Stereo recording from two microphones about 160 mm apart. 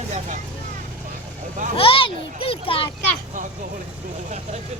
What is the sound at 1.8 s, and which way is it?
A child's voice, 35° left (ahead or behind).